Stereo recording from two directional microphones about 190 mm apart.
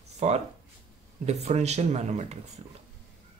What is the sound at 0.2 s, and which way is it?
Speech, 35° right (ahead or behind).